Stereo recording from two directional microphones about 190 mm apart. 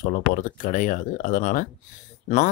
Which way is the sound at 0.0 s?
45° left (ahead or behind).